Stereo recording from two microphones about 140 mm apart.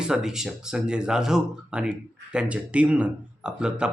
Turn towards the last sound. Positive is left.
turn(degrees=-5)  # may be behind; listen again after turning